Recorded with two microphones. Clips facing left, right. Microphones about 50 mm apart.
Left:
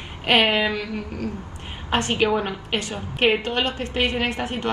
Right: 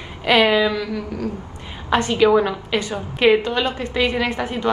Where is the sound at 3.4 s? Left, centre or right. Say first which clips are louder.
Right 3 dB; left.